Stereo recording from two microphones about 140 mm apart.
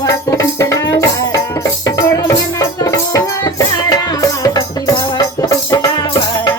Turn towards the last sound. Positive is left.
turn(degrees=30)  # may be behind; listen again after turning